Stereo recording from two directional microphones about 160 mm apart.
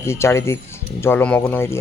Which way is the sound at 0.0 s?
15° left (ahead or behind).